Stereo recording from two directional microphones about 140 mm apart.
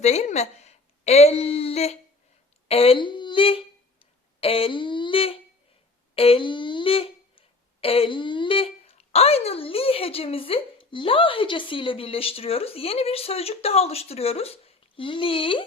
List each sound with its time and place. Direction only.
0.0 s a woman's voice: 50° left (ahead or behind)
4.4 s a sound: 40° left (ahead or behind)
6.1 s speech: 40° left (ahead or behind)